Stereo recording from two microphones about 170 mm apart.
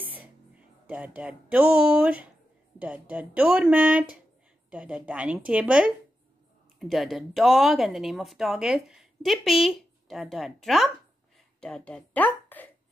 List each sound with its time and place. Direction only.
0.8 s speech: 10° right (ahead or behind); by 12.7 s 10° left (ahead or behind)